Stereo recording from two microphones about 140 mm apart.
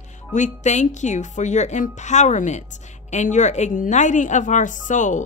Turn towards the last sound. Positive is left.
turn(degrees=65)  # may be behind; listen again after turning